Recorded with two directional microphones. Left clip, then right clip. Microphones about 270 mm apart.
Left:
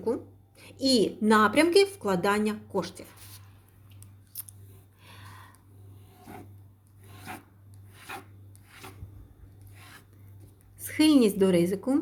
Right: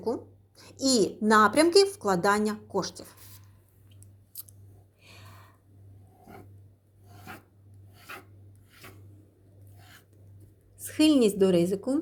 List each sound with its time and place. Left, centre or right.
0.5 s a sound: centre
1.0 s speech: centre
5.0 s gasp: centre
10.8 s speech: centre